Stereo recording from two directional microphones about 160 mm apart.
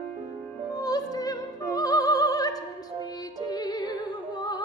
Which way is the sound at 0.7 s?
25° left (ahead or behind).